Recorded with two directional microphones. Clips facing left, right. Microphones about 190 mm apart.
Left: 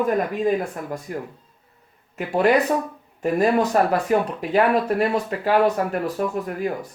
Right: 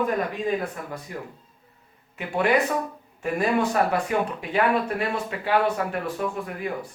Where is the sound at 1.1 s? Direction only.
45° left (ahead or behind).